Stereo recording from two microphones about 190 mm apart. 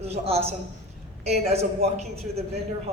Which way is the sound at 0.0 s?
35° right (ahead or behind).